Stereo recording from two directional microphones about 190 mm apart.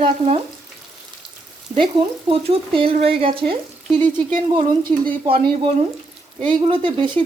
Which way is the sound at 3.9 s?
10° left (ahead or behind).